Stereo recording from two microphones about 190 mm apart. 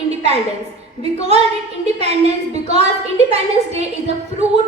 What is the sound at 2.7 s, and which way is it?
A woman's voice, 35° right (ahead or behind).